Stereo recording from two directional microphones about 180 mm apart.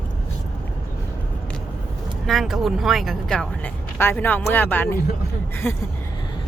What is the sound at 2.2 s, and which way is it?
Speech, centre (ahead or behind).